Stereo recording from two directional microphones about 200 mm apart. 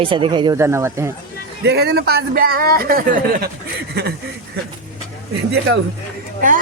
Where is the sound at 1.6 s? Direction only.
55° right (ahead or behind).